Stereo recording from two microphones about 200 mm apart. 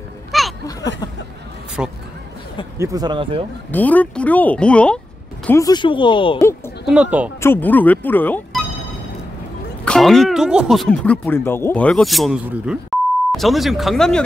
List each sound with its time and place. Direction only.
0.3 s a sound: centre (ahead or behind)
1.8 s speech: 5° right (ahead or behind)
2.8 s speech: 20° right (ahead or behind)
3.7 s speech: 10° left (ahead or behind)
5.5 s speech: 20° left (ahead or behind)
6.9 s speech: 5° right (ahead or behind)
7.3 s speech: 10° left (ahead or behind)
9.8 s speech: centre (ahead or behind)